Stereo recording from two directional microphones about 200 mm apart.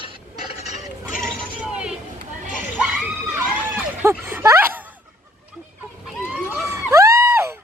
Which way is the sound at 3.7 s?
10° right (ahead or behind).